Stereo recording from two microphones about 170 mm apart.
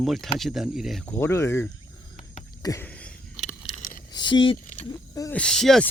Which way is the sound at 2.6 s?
20° left (ahead or behind).